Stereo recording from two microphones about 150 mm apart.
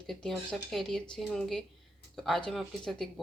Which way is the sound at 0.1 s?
Centre (ahead or behind).